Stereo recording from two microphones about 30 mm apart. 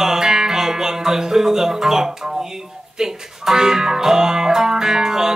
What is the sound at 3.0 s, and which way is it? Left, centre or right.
Speech, centre.